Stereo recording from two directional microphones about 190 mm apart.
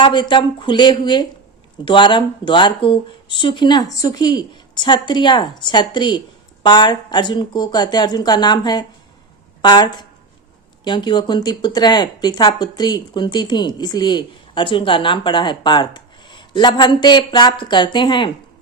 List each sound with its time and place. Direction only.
0.0 s speech: 25° left (ahead or behind)